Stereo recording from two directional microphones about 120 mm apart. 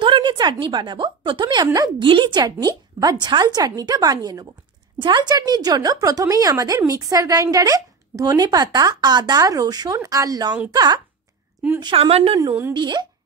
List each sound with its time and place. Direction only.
0.0 s a woman's voice: 40° right (ahead or behind)
2.0 s a woman's voice: 40° right (ahead or behind)
11.8 s speech: 50° right (ahead or behind)
12.7 s speech: 40° right (ahead or behind)